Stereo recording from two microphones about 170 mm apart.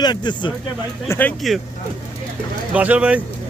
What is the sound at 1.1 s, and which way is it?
Speech, 10° left (ahead or behind).